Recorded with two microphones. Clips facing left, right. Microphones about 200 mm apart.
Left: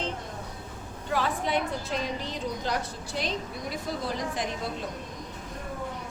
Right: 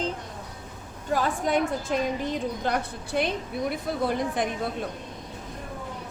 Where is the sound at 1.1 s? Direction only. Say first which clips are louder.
Right 3 dB; 45° right (ahead or behind).